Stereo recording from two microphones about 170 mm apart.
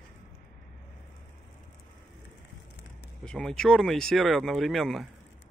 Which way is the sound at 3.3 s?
5° left (ahead or behind).